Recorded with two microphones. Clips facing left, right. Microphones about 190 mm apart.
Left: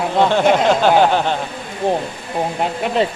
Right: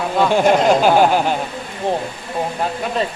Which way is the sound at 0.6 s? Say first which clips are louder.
Even; 10° right (ahead or behind).